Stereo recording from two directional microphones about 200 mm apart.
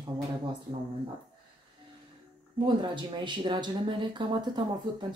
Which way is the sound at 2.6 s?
25° right (ahead or behind).